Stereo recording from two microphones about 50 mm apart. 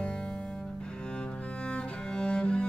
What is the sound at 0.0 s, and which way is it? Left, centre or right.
Cello, centre.